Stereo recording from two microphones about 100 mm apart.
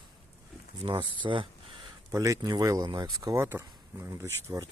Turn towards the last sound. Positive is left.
turn(degrees=-30)  # may be behind; listen again after turning